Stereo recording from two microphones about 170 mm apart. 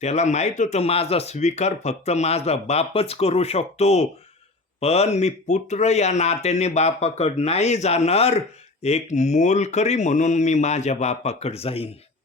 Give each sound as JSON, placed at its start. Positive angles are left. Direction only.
{"t": 0.0, "sound": "speech", "side_deg": 40}